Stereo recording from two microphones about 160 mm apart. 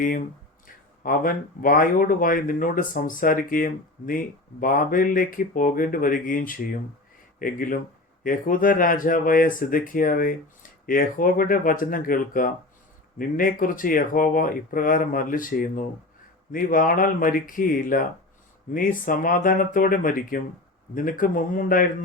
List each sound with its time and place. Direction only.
1.0 s speech: 60° left (ahead or behind)